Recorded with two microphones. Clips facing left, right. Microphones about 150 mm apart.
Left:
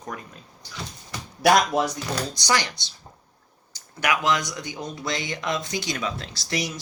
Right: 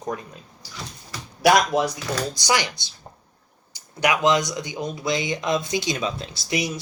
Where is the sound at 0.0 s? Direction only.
25° right (ahead or behind).